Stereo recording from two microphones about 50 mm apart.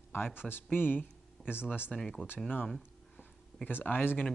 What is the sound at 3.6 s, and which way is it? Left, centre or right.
Speech, left.